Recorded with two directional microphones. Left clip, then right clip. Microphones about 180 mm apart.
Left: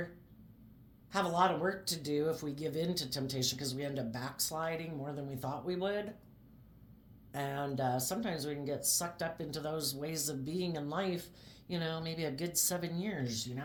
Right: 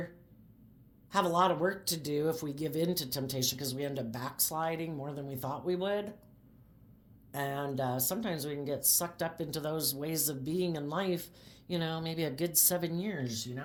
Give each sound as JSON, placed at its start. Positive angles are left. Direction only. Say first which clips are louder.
{"t": 1.1, "sound": "speech", "louder": "right 3 dB", "side_deg": -45}
{"t": 7.3, "sound": "speech", "louder": "right 2 dB", "side_deg": -40}